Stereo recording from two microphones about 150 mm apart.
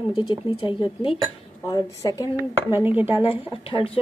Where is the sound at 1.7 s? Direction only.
25° left (ahead or behind).